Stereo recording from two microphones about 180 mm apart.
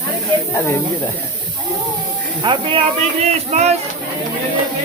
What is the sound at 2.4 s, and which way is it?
Speech, 25° right (ahead or behind).